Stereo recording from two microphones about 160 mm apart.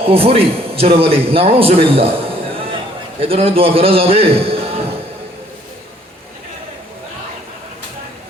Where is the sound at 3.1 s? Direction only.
35° right (ahead or behind).